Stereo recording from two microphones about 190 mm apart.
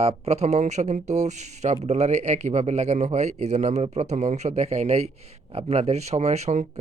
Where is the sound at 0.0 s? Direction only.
30° right (ahead or behind).